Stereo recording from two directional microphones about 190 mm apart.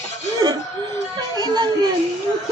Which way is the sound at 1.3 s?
20° right (ahead or behind).